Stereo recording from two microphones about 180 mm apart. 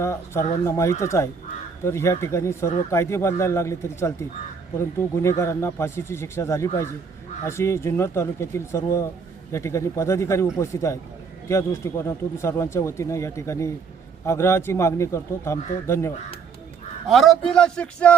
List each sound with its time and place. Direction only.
0.0 s speech: 15° left (ahead or behind)
17.1 s a man's voice: centre (ahead or behind)